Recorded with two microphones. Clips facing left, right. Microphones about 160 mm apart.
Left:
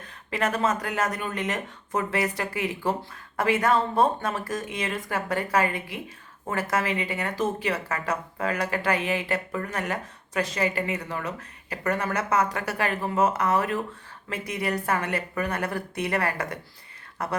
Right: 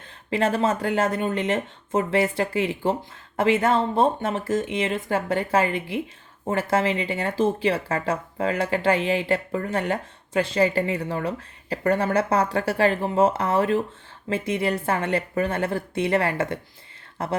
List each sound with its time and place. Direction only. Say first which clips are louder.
0.3 s speech: right 4 dB; 30° right (ahead or behind)